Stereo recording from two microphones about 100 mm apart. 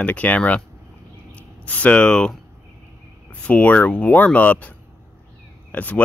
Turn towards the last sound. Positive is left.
turn(degrees=15)  # may be behind; listen again after turning